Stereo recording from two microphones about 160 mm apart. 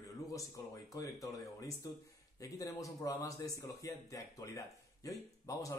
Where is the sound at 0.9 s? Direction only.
20° left (ahead or behind).